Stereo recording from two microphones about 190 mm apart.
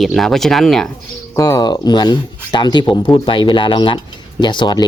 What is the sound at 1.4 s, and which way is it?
Speech, 20° left (ahead or behind).